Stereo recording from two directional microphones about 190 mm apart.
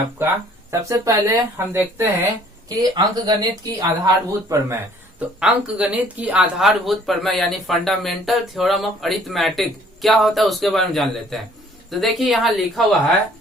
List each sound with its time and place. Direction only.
0.2 s speech: 15° right (ahead or behind)
5.4 s speech: 5° right (ahead or behind)